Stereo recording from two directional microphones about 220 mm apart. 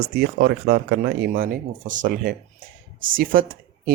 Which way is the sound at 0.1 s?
45° right (ahead or behind).